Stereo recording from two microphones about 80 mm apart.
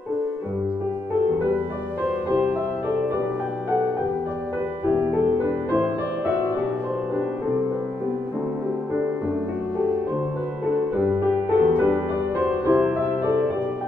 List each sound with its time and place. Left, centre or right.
5.7 s music: right
11.5 s music: centre